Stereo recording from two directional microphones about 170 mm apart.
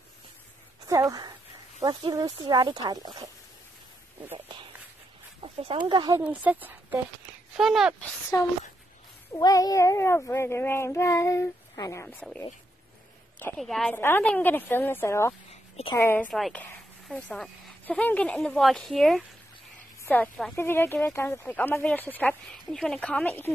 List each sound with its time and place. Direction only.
1.8 s speech: 25° right (ahead or behind)
5.4 s speech: 35° right (ahead or behind)
6.1 s speech: 10° right (ahead or behind)
8.3 s speech: 20° left (ahead or behind)
13.6 s speech: centre (ahead or behind)
13.9 s speech: 10° left (ahead or behind)